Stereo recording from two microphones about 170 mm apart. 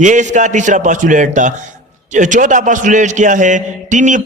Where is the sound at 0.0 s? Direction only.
45° right (ahead or behind).